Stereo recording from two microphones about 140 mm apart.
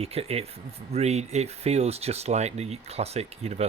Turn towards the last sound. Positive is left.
turn(degrees=-50)  # may be behind; listen again after turning